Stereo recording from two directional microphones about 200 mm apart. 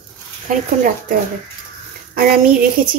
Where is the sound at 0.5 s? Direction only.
40° right (ahead or behind).